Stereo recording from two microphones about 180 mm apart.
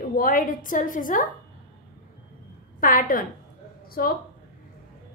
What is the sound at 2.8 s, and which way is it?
A woman's voice, 50° left (ahead or behind).